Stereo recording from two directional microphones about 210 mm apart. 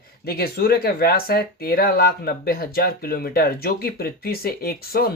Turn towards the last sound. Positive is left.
turn(degrees=45)  # may be behind; listen again after turning